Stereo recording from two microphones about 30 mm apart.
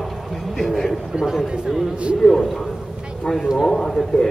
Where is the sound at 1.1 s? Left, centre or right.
Right.